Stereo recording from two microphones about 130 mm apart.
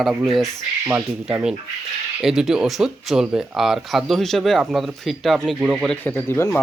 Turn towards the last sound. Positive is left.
turn(degrees=15)  # may be behind; listen again after turning